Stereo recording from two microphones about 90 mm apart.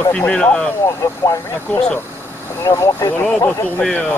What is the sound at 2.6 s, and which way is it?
Speech, 30° left (ahead or behind).